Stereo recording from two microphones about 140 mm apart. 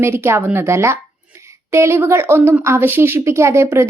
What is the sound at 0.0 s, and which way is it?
A woman's voice, 20° right (ahead or behind).